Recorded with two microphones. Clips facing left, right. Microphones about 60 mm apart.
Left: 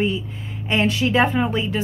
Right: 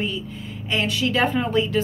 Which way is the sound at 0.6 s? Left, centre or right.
Left.